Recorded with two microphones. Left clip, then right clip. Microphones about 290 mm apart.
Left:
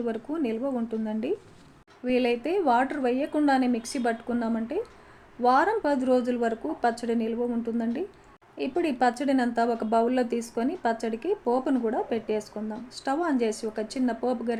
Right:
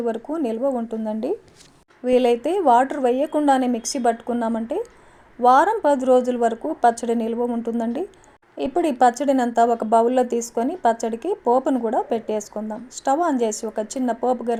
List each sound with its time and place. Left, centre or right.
0.0 s speech: right